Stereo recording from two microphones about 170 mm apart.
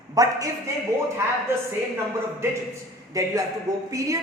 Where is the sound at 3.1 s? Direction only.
20° right (ahead or behind).